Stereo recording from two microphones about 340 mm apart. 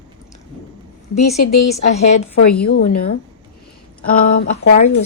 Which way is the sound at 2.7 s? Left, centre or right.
Left.